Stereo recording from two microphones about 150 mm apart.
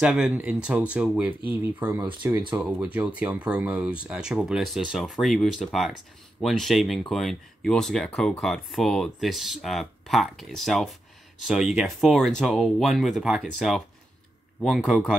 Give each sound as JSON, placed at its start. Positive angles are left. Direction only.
{"t": 0.0, "sound": "speech", "side_deg": -5}
{"t": 2.3, "sound": "speech", "side_deg": -25}
{"t": 2.6, "sound": "speech", "side_deg": -10}